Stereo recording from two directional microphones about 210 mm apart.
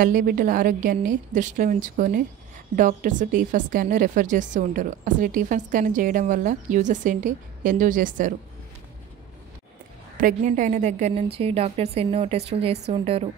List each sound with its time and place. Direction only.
0.0 s a woman's voice: 40° right (ahead or behind)
10.2 s a woman's voice: 35° right (ahead or behind)